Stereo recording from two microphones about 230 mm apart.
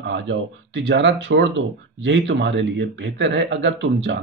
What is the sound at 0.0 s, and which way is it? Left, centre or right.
Speech, right.